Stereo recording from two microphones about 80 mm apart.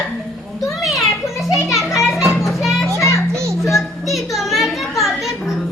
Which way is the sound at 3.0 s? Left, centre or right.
Right.